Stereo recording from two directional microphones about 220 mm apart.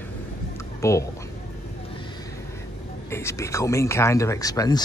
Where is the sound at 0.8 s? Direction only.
15° left (ahead or behind).